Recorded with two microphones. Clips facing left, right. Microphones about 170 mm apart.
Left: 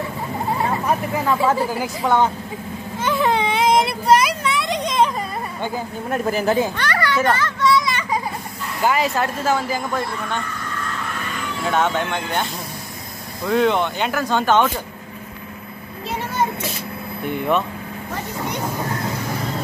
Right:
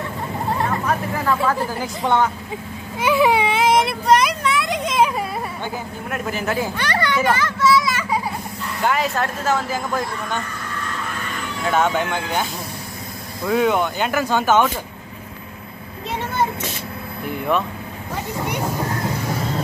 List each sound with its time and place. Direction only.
0.6 s hubbub: 15° left (ahead or behind)
1.6 s a woman's voice: 10° left (ahead or behind)
3.0 s baby cry: 10° right (ahead or behind)
6.0 s speech: 35° left (ahead or behind)
6.8 s children playing: 20° right (ahead or behind); by 8.2 s 5° right (ahead or behind)
8.8 s speech: 5° left (ahead or behind)
11.6 s speech: 5° right (ahead or behind)
13.5 s speech: 5° right (ahead or behind)
17.3 s speech: centre (ahead or behind)